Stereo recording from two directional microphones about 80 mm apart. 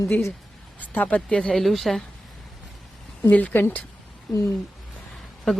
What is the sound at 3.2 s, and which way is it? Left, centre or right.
Speech, left.